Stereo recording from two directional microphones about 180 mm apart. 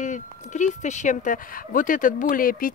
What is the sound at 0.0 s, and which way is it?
Speech, 45° left (ahead or behind).